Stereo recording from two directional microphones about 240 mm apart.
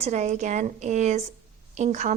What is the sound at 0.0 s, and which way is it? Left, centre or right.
A woman's voice, right.